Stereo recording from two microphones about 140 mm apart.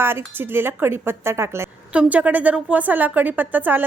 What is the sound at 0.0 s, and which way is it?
A woman's voice, 15° right (ahead or behind).